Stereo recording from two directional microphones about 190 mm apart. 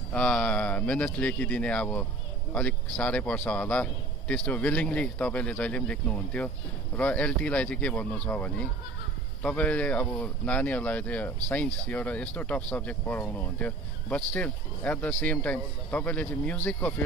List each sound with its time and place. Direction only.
0.1 s speech: 5° left (ahead or behind)